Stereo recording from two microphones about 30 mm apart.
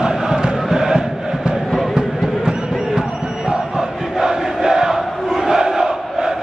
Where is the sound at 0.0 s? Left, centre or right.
Right.